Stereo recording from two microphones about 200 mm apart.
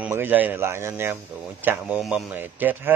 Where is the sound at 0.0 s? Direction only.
10° right (ahead or behind).